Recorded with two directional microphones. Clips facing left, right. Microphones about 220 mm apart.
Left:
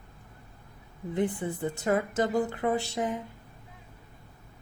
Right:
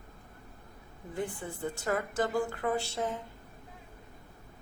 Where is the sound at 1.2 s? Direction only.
20° left (ahead or behind).